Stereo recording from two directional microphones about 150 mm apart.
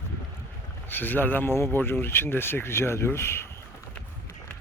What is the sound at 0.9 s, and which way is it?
Speech, 15° left (ahead or behind).